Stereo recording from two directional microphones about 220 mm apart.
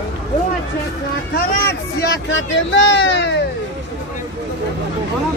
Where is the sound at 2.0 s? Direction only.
55° left (ahead or behind).